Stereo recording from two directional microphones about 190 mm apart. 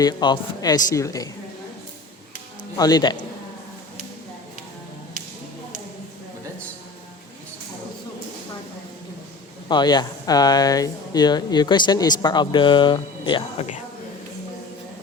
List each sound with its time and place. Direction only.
0.0 s speech: 20° left (ahead or behind)
2.7 s speech: 20° left (ahead or behind)
9.6 s speech: 20° left (ahead or behind)